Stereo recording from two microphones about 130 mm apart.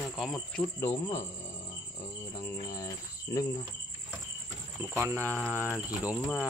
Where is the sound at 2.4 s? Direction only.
30° left (ahead or behind).